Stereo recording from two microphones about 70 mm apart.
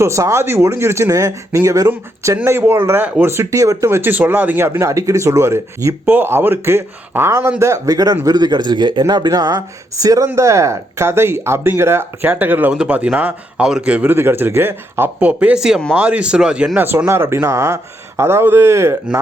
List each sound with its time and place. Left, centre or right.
0.0 s speech: right
2.4 s speech: right
3.3 s speech: right
3.8 s speech: right
4.8 s speech: right
6.1 s speech: right
7.6 s speech: right
8.2 s speech: right
10.3 s speech: right; by 14.1 s centre
14.1 s speech: right
15.2 s speech: centre
15.9 s speech: right
16.7 s speech: right
18.2 s speech: right